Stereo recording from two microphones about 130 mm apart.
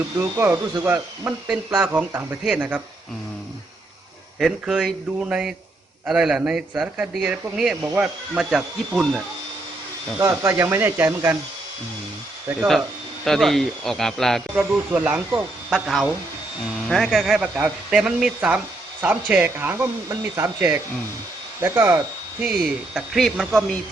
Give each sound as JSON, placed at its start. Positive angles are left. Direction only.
{"t": 0.2, "sound": "speech", "side_deg": -20}
{"t": 4.4, "sound": "speech", "side_deg": 0}
{"t": 10.2, "sound": "speech", "side_deg": -20}
{"t": 13.2, "sound": "speech", "side_deg": 0}
{"t": 14.5, "sound": "speech", "side_deg": -15}
{"t": 15.7, "sound": "speech", "side_deg": 0}
{"t": 22.4, "sound": "speech", "side_deg": -5}